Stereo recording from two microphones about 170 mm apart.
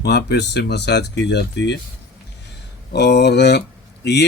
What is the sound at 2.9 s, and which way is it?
Speech, 80° left.